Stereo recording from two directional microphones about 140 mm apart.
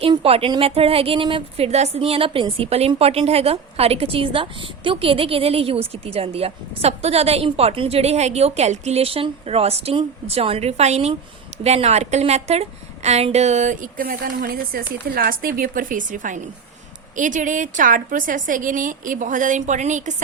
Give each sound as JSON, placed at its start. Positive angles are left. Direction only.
{"t": 0.1, "sound": "a woman's voice", "side_deg": -45}